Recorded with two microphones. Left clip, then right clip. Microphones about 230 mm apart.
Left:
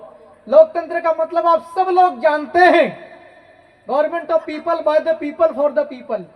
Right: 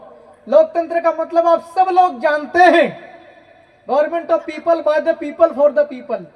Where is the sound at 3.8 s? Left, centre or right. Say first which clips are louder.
Right 2 dB; right.